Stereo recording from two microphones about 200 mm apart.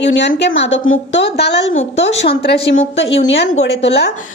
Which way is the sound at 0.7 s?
75° left (ahead or behind).